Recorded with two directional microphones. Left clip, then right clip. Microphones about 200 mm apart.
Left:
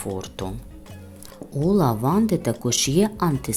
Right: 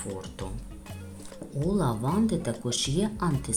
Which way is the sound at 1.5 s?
30° left (ahead or behind).